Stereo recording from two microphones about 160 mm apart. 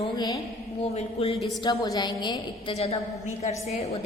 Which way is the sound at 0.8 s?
40° left (ahead or behind).